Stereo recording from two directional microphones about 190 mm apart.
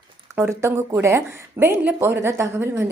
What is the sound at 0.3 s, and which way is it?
Speech, 10° right (ahead or behind).